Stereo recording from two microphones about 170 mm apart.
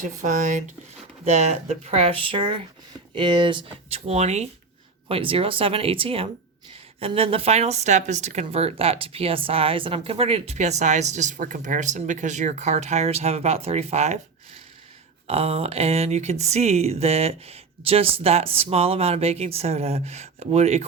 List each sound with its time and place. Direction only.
0.0 s speech: 45° right (ahead or behind)
15.3 s speech: 35° right (ahead or behind)